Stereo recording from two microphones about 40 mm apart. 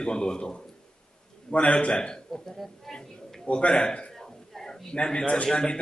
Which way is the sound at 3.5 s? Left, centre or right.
Left.